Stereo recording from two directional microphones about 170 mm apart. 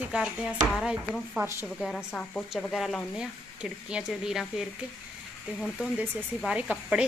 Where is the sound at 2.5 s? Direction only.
Centre (ahead or behind).